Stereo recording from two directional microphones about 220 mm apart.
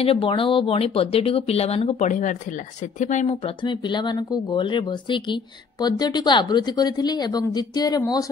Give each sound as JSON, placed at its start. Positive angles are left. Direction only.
{"t": 0.0, "sound": "speech", "side_deg": 25}